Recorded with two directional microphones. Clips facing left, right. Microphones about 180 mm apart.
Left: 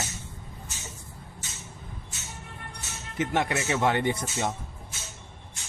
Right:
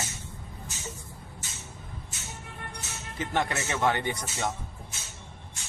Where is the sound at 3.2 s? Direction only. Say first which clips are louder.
Left 3 dB; 20° left (ahead or behind).